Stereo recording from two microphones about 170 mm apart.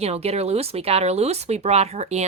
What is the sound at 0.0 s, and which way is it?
Speech, 35° right (ahead or behind).